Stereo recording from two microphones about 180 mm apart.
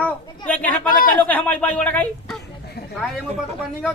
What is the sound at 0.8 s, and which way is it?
Speech, 50° left (ahead or behind).